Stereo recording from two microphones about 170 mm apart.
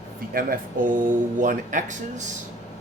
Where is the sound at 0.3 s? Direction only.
55° right (ahead or behind).